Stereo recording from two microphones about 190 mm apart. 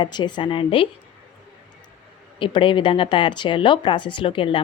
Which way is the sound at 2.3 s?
25° left (ahead or behind).